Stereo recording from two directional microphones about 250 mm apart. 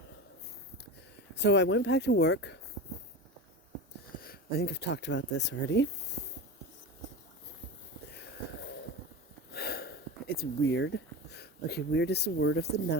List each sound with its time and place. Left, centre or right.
1.4 s speech: left
4.2 s speech: left
9.5 s a sound: left